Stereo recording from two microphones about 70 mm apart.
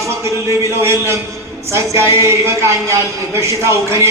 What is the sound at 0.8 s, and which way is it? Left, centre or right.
A man's voice, right.